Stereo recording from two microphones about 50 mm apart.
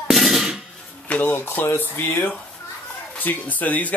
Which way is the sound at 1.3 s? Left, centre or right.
Left.